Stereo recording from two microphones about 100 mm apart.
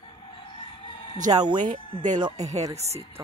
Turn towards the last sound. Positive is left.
turn(degrees=-90)